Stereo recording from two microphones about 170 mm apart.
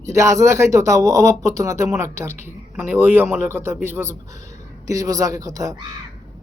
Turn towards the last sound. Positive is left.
turn(degrees=-20)  # may be behind; listen again after turning